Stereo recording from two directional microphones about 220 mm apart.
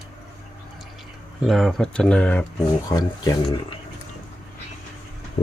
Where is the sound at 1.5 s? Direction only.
Centre (ahead or behind).